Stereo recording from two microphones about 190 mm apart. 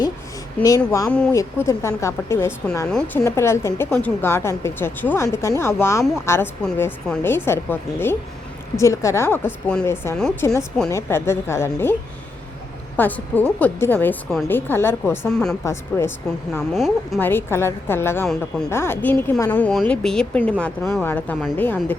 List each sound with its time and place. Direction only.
0.8 s speech: 15° left (ahead or behind)
3.2 s speech: 15° left (ahead or behind)
13.0 s speech: 10° left (ahead or behind)
15.6 s speech: 15° left (ahead or behind)
16.7 s speech: centre (ahead or behind)
17.2 s speech: 10° left (ahead or behind)